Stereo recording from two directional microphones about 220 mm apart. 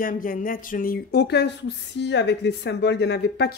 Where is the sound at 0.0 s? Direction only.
40° left (ahead or behind).